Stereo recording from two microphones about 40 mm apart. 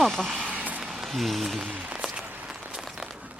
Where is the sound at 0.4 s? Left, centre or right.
Right.